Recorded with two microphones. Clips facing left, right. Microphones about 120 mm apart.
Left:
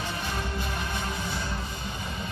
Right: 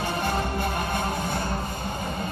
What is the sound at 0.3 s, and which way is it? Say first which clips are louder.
Music: right 6 dB; 55° right (ahead or behind).